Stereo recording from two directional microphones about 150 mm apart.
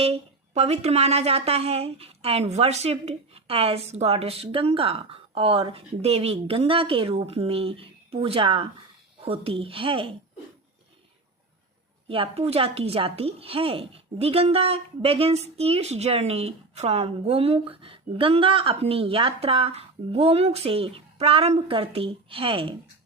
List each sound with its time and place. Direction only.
0.0 s a woman's voice: 45° right (ahead or behind)
12.0 s a woman's voice: 40° right (ahead or behind)